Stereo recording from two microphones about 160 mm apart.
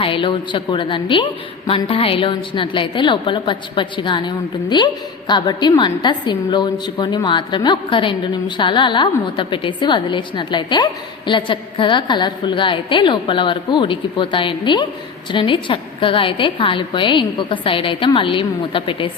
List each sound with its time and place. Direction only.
0.0 s a woman's voice: 35° left (ahead or behind)